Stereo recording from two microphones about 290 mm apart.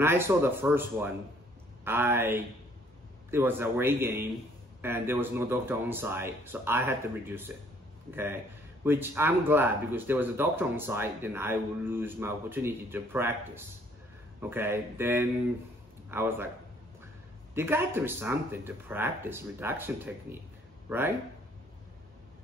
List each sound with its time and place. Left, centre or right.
0.0 s speech: centre
14.4 s speech: centre
17.6 s speech: centre